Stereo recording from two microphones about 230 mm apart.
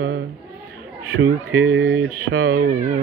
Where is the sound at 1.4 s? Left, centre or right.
Right.